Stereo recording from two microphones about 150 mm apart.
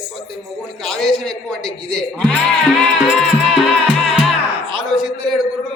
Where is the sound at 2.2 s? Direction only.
5° left (ahead or behind).